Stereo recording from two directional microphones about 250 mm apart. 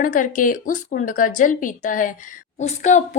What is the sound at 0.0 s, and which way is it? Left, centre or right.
A woman's voice, left.